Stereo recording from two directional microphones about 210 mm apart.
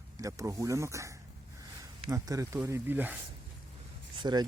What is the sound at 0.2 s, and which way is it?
Speech, 15° right (ahead or behind).